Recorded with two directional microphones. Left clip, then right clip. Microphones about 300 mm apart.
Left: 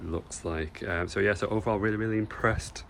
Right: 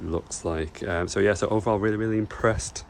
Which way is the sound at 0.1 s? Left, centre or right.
Centre.